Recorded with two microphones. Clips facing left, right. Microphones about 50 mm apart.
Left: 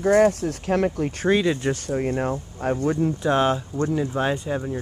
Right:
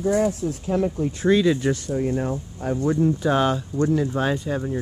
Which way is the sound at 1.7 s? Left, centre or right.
Left.